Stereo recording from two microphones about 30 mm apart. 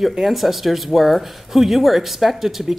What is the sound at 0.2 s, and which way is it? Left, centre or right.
A woman's voice, centre.